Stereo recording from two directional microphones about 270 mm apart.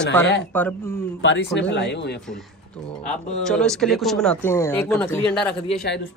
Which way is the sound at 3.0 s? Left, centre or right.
Centre.